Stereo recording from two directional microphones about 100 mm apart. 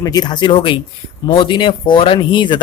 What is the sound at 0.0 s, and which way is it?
A man's voice, 40° left (ahead or behind).